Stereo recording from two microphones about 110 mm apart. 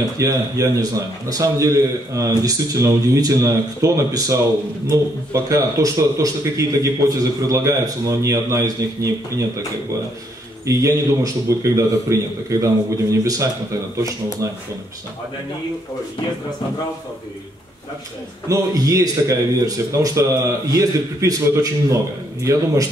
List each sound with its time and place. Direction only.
0.2 s speech: 30° right (ahead or behind)
10.6 s speech: 30° right (ahead or behind)
18.5 s speech: 30° right (ahead or behind)